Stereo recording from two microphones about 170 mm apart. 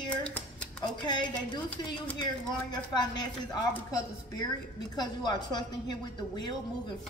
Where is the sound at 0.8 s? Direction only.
25° left (ahead or behind).